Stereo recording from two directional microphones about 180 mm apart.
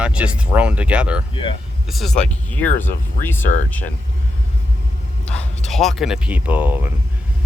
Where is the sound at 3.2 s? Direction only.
10° left (ahead or behind).